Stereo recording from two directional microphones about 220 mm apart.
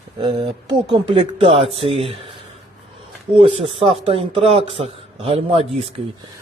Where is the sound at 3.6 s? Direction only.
25° right (ahead or behind).